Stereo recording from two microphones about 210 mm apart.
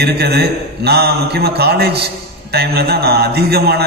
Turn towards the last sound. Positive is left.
turn(degrees=-50)  # may be behind; listen again after turning